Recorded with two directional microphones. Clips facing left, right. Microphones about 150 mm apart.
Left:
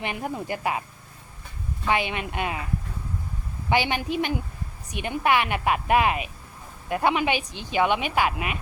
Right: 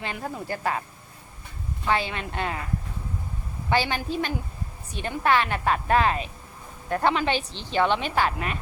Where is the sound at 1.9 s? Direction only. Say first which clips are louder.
Left 1 dB; 15° left (ahead or behind).